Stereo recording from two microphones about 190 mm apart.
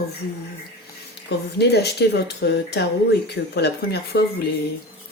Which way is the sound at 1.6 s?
60° left (ahead or behind).